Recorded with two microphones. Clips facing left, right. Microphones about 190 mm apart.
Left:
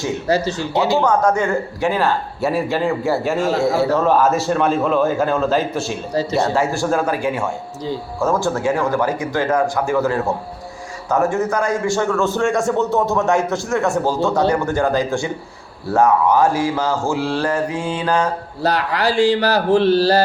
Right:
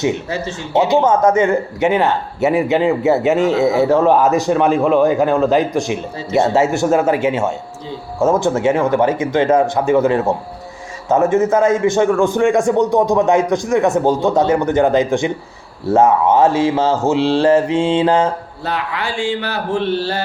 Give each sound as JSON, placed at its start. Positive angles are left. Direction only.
{"t": 1.0, "sound": "a man's voice", "side_deg": -20}
{"t": 18.6, "sound": "speech", "side_deg": 40}